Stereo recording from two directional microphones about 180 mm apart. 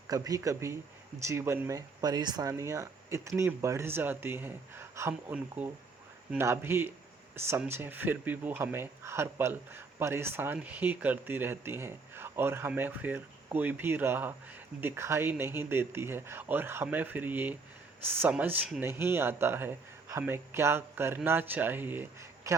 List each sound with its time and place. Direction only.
0.1 s speech: 20° right (ahead or behind)